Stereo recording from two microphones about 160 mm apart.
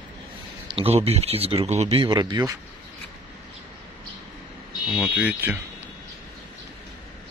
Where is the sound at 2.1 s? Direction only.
25° right (ahead or behind).